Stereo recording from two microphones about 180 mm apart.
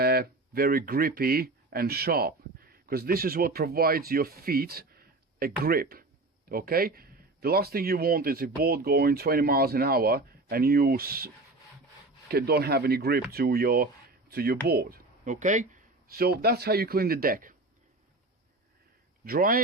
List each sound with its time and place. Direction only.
0.0 s speech: 60° right (ahead or behind)
12.3 s speech: 60° right (ahead or behind)
19.2 s a man's voice: 50° right (ahead or behind)